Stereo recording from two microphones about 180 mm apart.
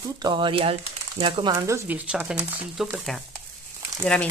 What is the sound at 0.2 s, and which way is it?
Speech, 25° right (ahead or behind).